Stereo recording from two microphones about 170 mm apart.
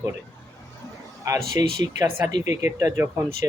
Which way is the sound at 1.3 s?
20° right (ahead or behind).